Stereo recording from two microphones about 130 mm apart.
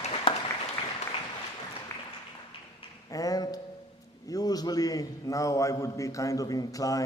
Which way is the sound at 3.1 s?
25° left (ahead or behind).